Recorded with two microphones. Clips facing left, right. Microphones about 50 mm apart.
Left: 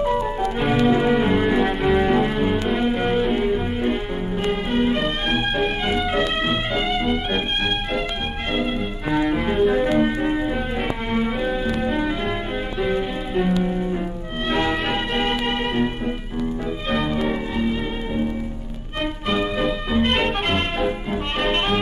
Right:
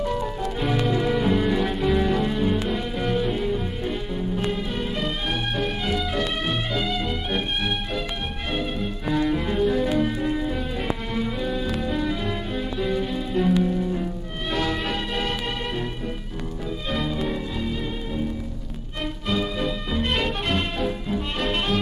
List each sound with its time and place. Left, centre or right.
0.0 s music: left
7.2 s music: centre
9.1 s music: left
17.1 s music: left
19.5 s music: centre